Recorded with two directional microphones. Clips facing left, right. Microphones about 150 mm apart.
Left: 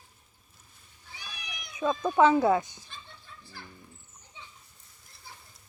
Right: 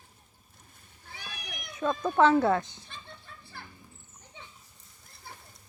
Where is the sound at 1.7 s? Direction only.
5° left (ahead or behind).